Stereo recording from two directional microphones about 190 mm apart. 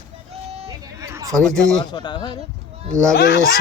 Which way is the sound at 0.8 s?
15° right (ahead or behind).